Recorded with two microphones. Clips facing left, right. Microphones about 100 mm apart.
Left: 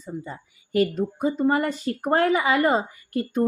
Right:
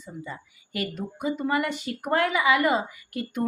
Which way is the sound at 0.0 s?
40° left (ahead or behind).